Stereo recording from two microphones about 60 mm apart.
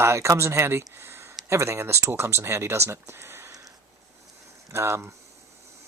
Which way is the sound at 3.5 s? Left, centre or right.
Right.